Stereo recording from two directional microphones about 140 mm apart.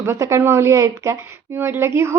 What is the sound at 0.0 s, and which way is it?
A woman's voice, 20° right (ahead or behind).